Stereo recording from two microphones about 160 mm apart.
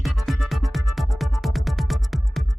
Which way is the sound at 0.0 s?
Centre (ahead or behind).